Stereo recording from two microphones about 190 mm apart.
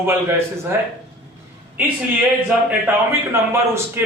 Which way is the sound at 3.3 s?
15° right (ahead or behind).